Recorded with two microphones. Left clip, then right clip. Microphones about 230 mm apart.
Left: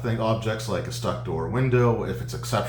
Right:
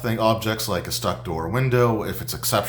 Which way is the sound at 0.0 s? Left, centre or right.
Right.